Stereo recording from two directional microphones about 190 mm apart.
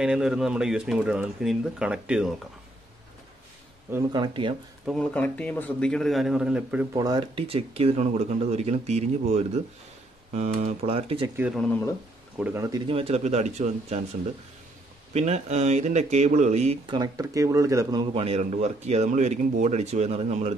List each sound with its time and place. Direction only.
0.0 s speech: 5° right (ahead or behind)
3.9 s speech: 25° right (ahead or behind)
4.8 s speech: 5° left (ahead or behind)
6.9 s speech: 20° right (ahead or behind); by 9.6 s 35° right (ahead or behind)
10.8 s speech: 30° right (ahead or behind)
11.3 s speech: 5° right (ahead or behind)
12.8 s speech: 30° right (ahead or behind)
15.1 s speech: 35° right (ahead or behind)
16.8 s speech: 25° right (ahead or behind)
18.1 s speech: 30° right (ahead or behind)